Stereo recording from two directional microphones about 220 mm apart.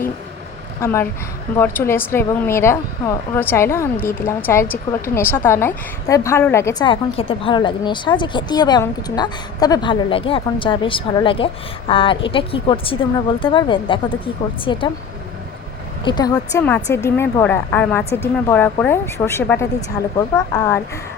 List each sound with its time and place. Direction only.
0.8 s a woman's voice: 10° left (ahead or behind)
16.0 s a woman's voice: 20° left (ahead or behind)